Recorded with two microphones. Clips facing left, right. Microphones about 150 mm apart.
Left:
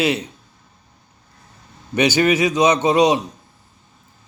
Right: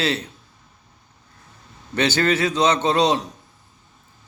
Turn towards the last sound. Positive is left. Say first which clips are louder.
# left 4 dB
turn(degrees=10)  # may be behind; listen again after turning